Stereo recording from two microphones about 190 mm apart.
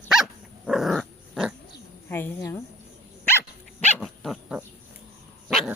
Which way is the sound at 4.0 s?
Centre (ahead or behind).